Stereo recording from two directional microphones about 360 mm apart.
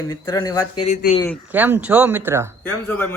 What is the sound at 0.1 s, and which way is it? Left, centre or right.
Speech, centre.